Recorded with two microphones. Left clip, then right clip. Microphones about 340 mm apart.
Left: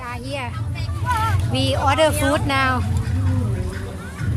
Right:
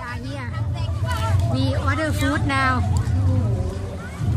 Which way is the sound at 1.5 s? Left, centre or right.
Centre.